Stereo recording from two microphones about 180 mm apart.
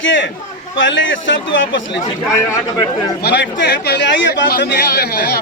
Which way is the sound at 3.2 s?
65° left (ahead or behind).